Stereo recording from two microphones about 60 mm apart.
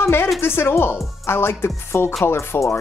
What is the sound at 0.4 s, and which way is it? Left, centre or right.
Speech, left.